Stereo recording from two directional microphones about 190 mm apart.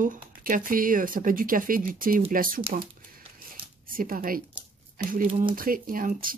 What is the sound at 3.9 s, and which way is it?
Speech, 50° right (ahead or behind).